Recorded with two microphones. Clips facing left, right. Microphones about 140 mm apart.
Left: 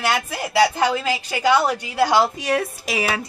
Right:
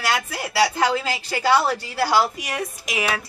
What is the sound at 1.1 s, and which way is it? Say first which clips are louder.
A woman's voice: left 1 dB; 15° left (ahead or behind).